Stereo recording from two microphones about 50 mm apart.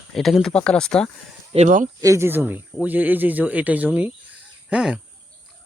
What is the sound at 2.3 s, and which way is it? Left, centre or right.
Speech, right.